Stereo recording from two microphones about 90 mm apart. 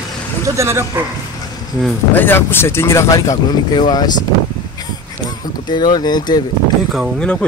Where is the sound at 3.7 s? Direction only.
50° left (ahead or behind).